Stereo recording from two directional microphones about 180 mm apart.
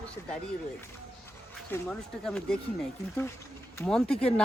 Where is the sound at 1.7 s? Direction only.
5° left (ahead or behind).